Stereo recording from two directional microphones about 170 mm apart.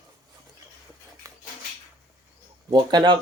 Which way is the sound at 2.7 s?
25° right (ahead or behind).